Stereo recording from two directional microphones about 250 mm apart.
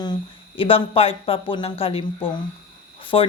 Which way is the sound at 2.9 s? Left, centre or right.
Left.